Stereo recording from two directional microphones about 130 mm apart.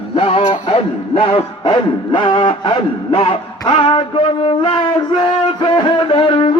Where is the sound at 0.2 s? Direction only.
50° left (ahead or behind).